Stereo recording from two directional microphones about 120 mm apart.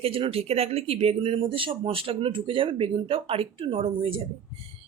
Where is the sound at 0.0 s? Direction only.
55° right (ahead or behind).